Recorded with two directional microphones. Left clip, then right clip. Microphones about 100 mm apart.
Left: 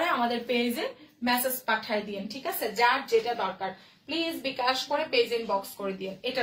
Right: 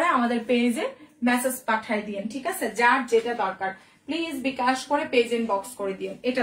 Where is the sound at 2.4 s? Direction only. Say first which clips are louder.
Right 3 dB; 20° right (ahead or behind).